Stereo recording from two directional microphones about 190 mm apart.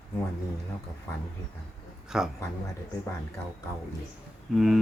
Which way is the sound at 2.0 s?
5° right (ahead or behind).